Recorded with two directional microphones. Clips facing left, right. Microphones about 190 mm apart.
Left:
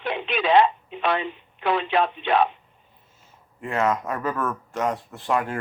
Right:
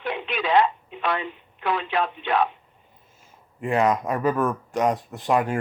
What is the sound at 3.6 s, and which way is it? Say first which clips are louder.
Speech: right 3 dB; 15° right (ahead or behind).